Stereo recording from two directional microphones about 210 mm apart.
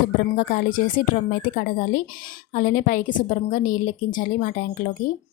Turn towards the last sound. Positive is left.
turn(degrees=40)  # may be behind; listen again after turning